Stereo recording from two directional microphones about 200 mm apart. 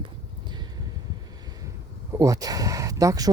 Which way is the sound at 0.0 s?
20° right (ahead or behind).